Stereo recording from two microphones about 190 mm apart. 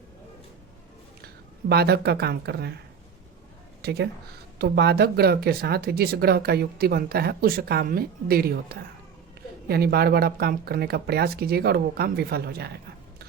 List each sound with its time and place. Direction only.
1.7 s a woman's voice: 55° right (ahead or behind)